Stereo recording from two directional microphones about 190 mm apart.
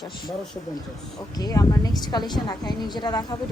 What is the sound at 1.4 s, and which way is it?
A woman's voice, 20° left (ahead or behind).